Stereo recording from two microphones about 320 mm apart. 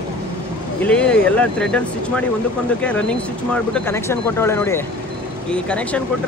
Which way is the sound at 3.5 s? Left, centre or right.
Centre.